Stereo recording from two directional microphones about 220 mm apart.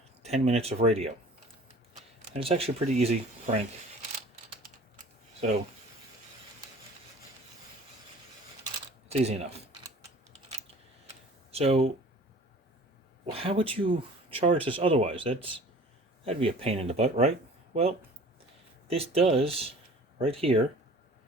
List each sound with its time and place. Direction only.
0.2 s speech: 30° right (ahead or behind)
2.1 s speech: 25° right (ahead or behind)
9.0 s speech: 30° right (ahead or behind)
11.1 s tick-tock: 25° right (ahead or behind)
13.3 s speech: 25° right (ahead or behind)
18.9 s speech: 25° right (ahead or behind)